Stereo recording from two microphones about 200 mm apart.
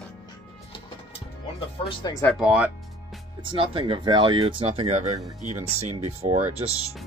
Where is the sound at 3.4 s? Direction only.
25° right (ahead or behind).